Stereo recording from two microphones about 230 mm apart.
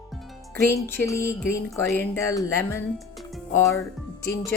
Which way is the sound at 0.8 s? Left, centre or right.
Centre.